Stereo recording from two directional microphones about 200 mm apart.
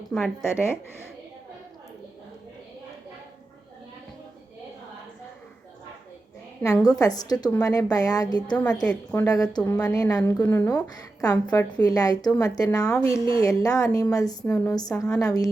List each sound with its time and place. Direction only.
0.1 s a woman's voice: 5° left (ahead or behind)
6.6 s a woman's voice: 10° left (ahead or behind)
6.8 s a woman's voice: 20° left (ahead or behind)
8.5 s a woman's voice: 5° left (ahead or behind)
8.9 s a woman's voice: 20° left (ahead or behind)